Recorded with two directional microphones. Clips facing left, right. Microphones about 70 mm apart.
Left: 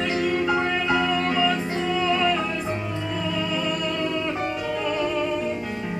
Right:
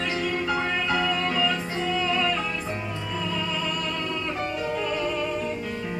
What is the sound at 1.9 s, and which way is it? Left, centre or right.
Music, centre.